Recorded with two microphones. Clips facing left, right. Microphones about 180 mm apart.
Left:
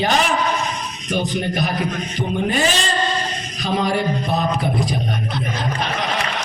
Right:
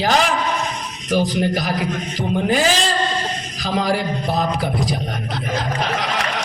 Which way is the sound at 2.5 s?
90° right.